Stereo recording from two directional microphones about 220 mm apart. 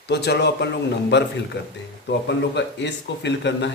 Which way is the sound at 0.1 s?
50° left (ahead or behind).